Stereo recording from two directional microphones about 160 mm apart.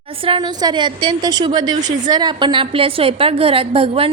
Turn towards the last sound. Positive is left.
turn(degrees=-35)  # may be behind; listen again after turning